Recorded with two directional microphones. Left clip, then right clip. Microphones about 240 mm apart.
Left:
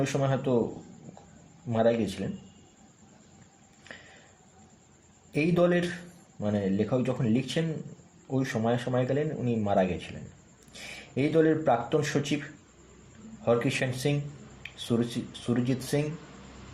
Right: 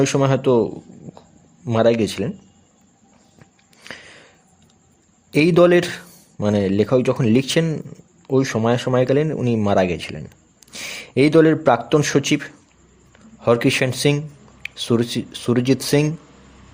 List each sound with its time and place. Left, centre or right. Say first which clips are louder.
0.0 s speech: right 11 dB; right
1.6 s speech: right 9 dB; right
5.3 s a man's voice: right 12 dB; right
13.4 s speech: right 10 dB; right